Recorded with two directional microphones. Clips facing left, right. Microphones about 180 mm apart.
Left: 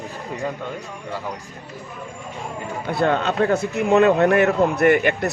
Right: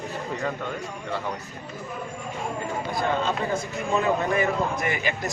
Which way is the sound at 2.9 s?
65° left (ahead or behind).